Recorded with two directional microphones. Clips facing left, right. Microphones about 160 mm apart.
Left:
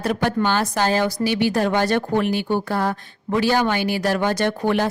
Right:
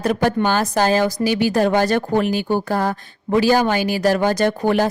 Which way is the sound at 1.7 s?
40° right (ahead or behind).